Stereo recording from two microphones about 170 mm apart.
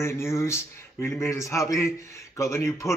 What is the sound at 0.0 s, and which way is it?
A man's voice, 15° left (ahead or behind).